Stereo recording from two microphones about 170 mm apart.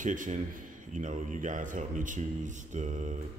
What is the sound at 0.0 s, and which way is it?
Speech, 50° right (ahead or behind).